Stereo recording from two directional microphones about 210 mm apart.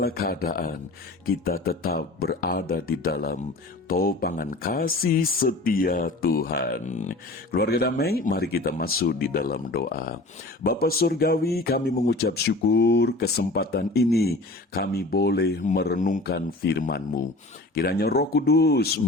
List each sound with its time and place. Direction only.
0.0 s speech: 45° left (ahead or behind)